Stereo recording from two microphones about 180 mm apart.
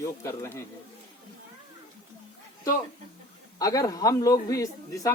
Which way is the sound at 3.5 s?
20° left (ahead or behind).